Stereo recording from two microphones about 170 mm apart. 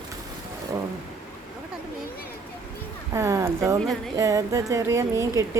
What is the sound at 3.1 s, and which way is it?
Speech, 15° right (ahead or behind).